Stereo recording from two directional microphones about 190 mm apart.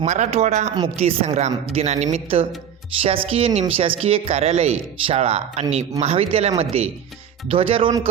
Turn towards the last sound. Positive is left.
turn(degrees=-30)  # may be behind; listen again after turning